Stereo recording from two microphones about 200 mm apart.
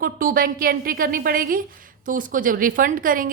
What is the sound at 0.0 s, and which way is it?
A woman's voice, 45° right (ahead or behind).